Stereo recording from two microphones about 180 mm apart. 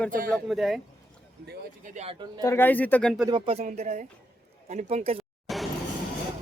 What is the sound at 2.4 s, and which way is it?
Speech, 15° left (ahead or behind).